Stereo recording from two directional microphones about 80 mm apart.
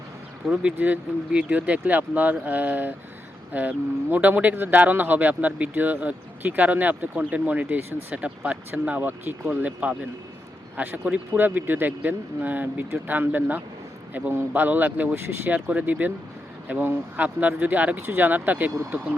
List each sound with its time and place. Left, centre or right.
0.4 s speech: centre